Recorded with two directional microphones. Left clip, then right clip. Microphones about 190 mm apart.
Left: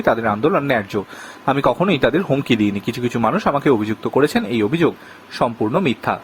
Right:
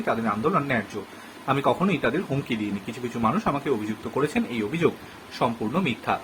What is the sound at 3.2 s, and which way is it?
Speech, 50° left (ahead or behind).